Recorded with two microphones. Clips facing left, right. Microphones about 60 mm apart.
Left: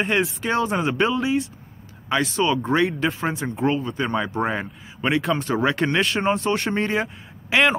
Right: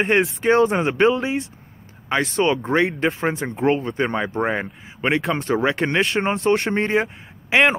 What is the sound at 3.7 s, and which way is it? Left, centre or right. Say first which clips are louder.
Speech: right 4 dB; right.